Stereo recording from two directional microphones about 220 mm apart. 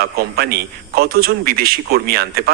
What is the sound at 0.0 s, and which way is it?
A man's voice, 45° right (ahead or behind).